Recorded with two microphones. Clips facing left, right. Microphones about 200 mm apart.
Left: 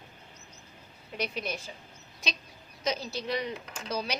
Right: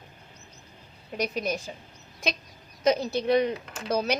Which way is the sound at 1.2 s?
45° right (ahead or behind).